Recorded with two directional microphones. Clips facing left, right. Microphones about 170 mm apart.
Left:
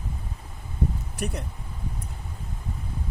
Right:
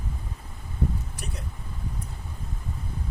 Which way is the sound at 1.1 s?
60° left (ahead or behind).